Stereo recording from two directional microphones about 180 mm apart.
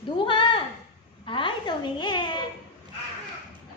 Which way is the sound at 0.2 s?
30° left (ahead or behind).